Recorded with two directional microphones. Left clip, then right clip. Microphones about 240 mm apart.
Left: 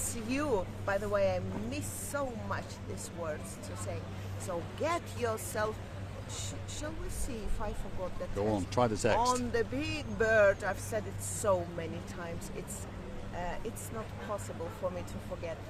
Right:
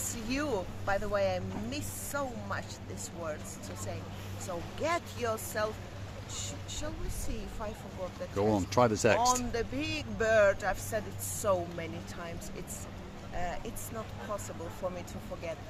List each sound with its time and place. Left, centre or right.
0.3 s speech: centre
4.4 s speech: centre
8.4 s speech: right
9.1 s speech: centre
13.3 s speech: centre